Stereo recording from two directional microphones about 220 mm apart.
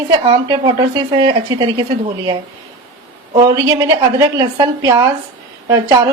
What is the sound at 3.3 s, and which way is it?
A woman's voice, 15° right (ahead or behind).